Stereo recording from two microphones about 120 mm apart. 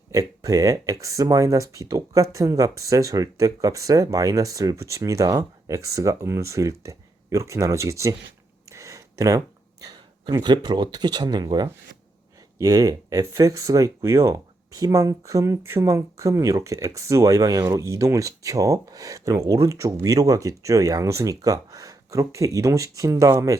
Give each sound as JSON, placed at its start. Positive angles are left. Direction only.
{"t": 0.1, "sound": "speech", "side_deg": -30}
{"t": 8.7, "sound": "a sound", "side_deg": -25}
{"t": 9.8, "sound": "speech", "side_deg": -35}
{"t": 12.5, "sound": "speech", "side_deg": -30}